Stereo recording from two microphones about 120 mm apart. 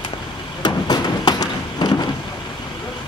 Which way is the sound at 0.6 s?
35° left (ahead or behind).